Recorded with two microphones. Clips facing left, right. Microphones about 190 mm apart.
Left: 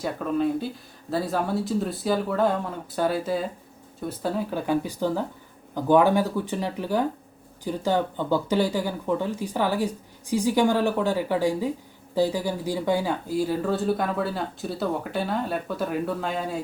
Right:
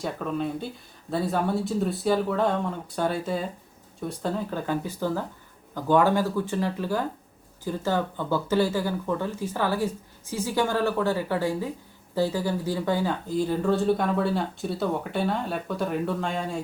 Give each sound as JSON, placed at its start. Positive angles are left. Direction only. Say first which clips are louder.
{"t": 0.0, "sound": "speech", "louder": "left 4 dB", "side_deg": 0}